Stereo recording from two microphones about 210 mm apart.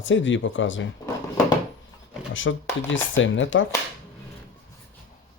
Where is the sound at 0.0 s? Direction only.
65° left (ahead or behind).